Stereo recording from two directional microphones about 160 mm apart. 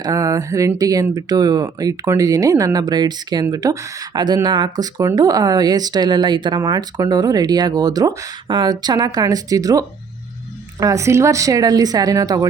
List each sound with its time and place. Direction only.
0.0 s speech: 20° right (ahead or behind)